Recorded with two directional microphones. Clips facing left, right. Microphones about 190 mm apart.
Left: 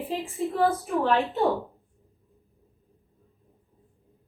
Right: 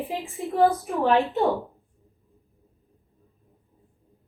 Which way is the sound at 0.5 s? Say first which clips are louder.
Right 4 dB; 15° right (ahead or behind).